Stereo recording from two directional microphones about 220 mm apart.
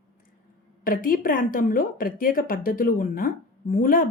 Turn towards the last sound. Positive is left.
turn(degrees=40)  # may be behind; listen again after turning